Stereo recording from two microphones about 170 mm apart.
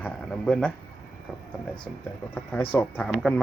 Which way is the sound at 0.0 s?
5° left (ahead or behind).